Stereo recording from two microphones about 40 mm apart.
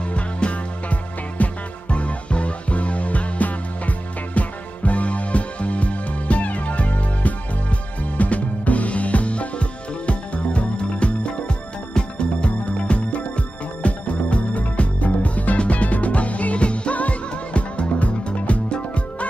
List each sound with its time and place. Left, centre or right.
0.1 s music: left